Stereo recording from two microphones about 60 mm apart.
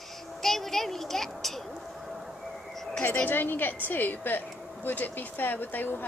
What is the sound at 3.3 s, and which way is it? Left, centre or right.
Speech, left.